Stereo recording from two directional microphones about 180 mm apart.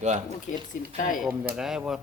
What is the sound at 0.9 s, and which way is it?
Speech, 50° left (ahead or behind).